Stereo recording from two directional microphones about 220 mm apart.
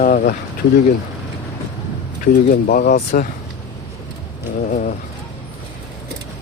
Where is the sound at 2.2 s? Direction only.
40° left (ahead or behind).